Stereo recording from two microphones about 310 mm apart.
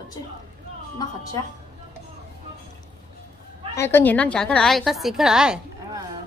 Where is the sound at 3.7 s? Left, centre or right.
Centre.